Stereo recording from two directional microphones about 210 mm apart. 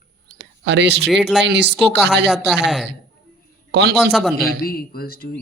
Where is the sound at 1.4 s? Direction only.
55° right (ahead or behind).